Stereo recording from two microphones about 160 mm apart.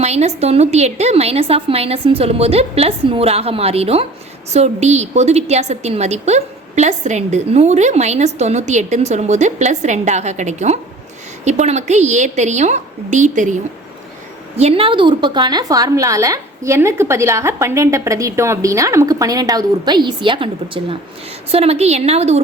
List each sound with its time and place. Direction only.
0.0 s a woman's voice: 40° right (ahead or behind)
14.5 s a woman's voice: 40° right (ahead or behind)